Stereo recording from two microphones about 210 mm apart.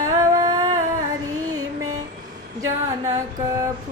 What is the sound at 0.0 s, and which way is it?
Humming, 15° right (ahead or behind).